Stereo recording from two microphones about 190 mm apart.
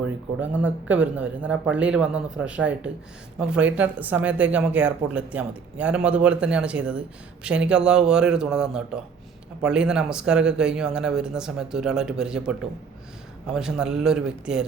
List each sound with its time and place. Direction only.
0.6 s a man's voice: 5° right (ahead or behind)